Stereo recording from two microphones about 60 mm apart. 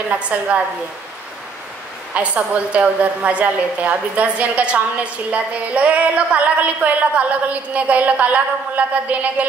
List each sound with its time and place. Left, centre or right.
0.1 s a woman's voice: right
2.1 s a woman's voice: right